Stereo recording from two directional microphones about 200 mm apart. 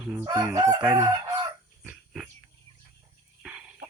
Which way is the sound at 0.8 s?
5° right (ahead or behind).